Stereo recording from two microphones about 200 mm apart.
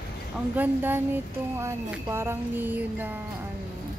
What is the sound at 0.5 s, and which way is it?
Speech, 10° right (ahead or behind).